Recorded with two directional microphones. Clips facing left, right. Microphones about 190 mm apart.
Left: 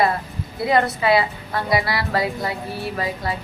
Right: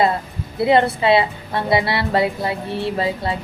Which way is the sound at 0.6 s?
25° right (ahead or behind).